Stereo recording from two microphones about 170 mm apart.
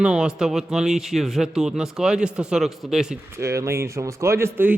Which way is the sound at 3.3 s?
15° right (ahead or behind).